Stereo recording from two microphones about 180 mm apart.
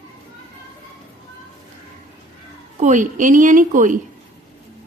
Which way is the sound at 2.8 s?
45° right (ahead or behind).